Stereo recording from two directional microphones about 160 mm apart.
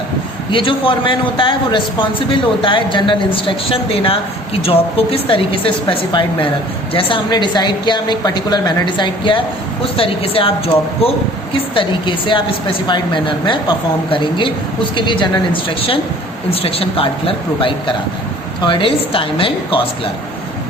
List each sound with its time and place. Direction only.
0.5 s a man's voice: 35° left (ahead or behind)